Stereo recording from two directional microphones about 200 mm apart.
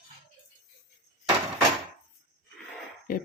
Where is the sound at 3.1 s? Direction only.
45° left (ahead or behind).